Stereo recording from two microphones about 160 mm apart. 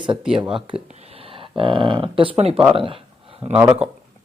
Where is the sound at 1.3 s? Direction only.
35° right (ahead or behind).